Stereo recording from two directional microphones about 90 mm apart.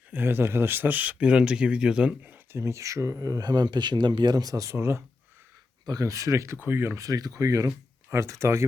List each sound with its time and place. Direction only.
0.1 s speech: 25° right (ahead or behind)
2.2 s speech: 30° right (ahead or behind)
5.8 s speech: 45° right (ahead or behind)